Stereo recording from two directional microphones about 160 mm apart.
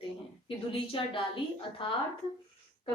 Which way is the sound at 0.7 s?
35° left (ahead or behind).